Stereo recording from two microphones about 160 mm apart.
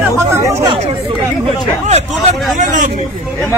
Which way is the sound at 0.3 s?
20° right (ahead or behind).